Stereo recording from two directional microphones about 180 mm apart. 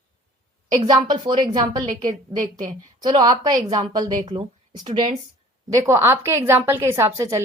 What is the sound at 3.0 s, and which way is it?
A woman's voice, 25° right (ahead or behind).